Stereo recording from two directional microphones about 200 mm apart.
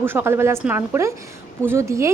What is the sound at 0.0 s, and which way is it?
A woman's voice, 10° right (ahead or behind).